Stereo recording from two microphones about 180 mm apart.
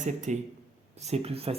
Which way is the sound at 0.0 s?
40° right (ahead or behind).